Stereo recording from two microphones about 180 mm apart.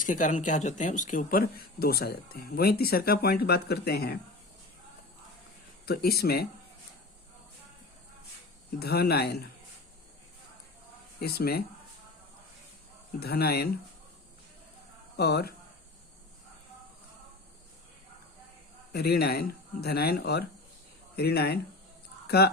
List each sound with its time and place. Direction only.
0.0 s speech: 45° left (ahead or behind); by 4.2 s 60° left (ahead or behind)
5.8 s speech: 60° left (ahead or behind)
8.8 s speech: 60° left (ahead or behind)
11.3 s speech: 60° left (ahead or behind)
13.1 s speech: 60° left (ahead or behind)
15.1 s speech: 65° left (ahead or behind)
18.9 s speech: 60° left (ahead or behind)